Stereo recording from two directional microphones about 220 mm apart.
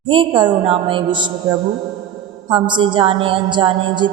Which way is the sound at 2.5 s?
20° right (ahead or behind).